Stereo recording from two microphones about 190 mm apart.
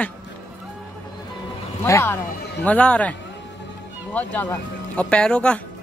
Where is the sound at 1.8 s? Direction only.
15° left (ahead or behind).